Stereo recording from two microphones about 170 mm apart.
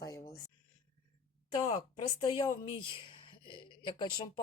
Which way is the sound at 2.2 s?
25° left (ahead or behind).